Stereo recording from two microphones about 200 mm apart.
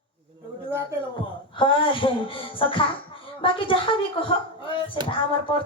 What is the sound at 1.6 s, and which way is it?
Speech, 25° left (ahead or behind).